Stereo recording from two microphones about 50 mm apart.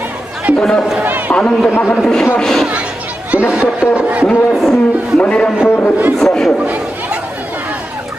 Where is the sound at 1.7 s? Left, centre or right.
Left.